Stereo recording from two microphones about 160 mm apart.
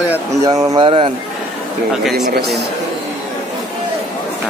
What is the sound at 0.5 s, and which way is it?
Speech, 25° right (ahead or behind).